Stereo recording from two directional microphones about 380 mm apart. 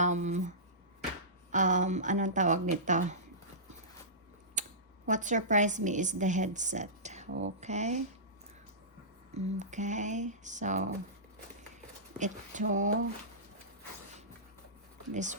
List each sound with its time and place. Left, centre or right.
0.0 s a woman's voice: centre
4.6 s a sound: centre
5.0 s a woman's voice: centre
9.3 s a woman's voice: centre
12.2 s a woman's voice: centre
15.1 s a woman's voice: centre